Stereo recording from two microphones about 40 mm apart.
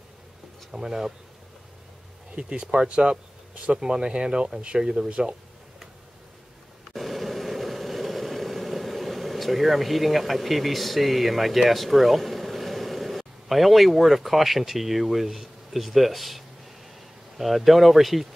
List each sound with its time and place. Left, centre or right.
0.7 s speech: centre
2.3 s speech: right
3.7 s speech: centre
6.9 s vehicle: centre
17.4 s speech: centre